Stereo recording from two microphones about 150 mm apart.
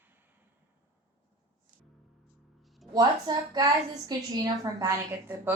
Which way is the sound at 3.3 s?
30° right (ahead or behind).